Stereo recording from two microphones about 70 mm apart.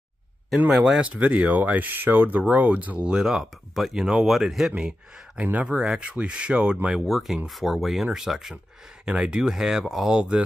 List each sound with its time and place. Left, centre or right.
0.7 s speech: centre
1.1 s speech: right